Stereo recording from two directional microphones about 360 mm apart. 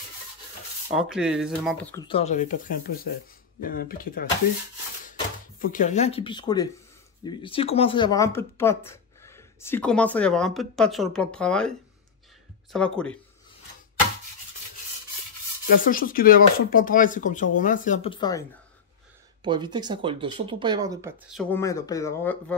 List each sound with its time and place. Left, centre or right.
0.9 s speech: centre
2.0 s speech: centre
5.6 s speech: left; by 11.7 s centre
12.7 s speech: centre
15.7 s speech: left
19.4 s speech: centre